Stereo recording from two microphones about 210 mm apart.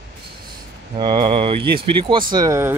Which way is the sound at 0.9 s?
20° right (ahead or behind).